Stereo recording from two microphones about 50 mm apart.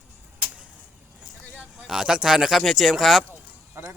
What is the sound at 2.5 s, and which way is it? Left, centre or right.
Speech, centre.